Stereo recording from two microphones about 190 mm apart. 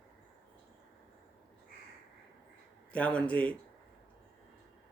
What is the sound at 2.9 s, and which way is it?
Speech, 5° left (ahead or behind).